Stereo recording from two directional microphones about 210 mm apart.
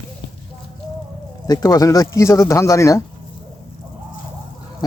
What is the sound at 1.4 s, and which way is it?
Speech, 20° left (ahead or behind).